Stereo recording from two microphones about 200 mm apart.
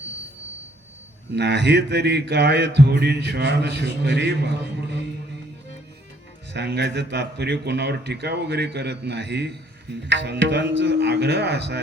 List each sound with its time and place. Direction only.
1.3 s speech: 60° right (ahead or behind)
6.5 s speech: 60° right (ahead or behind)